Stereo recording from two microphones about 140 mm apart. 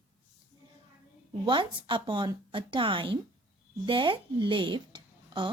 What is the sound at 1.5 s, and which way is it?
A woman's voice, 35° right (ahead or behind).